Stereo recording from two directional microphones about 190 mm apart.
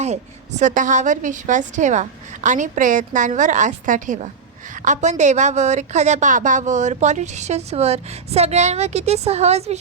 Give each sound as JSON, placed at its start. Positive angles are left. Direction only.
{"t": 0.0, "sound": "a woman's voice", "side_deg": -35}